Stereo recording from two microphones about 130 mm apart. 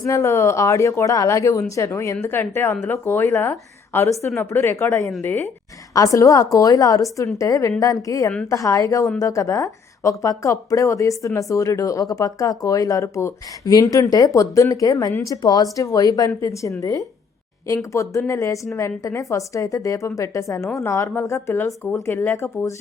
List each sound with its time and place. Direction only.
0.0 s speech: 20° left (ahead or behind)